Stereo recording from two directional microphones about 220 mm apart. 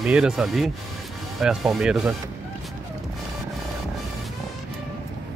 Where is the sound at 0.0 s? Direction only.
5° right (ahead or behind).